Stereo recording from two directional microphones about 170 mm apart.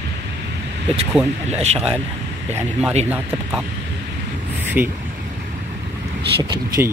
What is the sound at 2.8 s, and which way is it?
Speech, 40° right (ahead or behind).